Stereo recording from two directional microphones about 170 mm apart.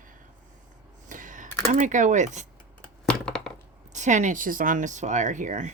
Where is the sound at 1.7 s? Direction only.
50° right (ahead or behind).